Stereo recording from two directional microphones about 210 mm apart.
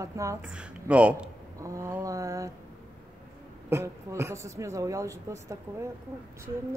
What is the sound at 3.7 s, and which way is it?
Speech, 15° right (ahead or behind).